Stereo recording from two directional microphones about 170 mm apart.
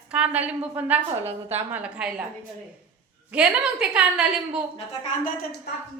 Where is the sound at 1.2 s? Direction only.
35° right (ahead or behind).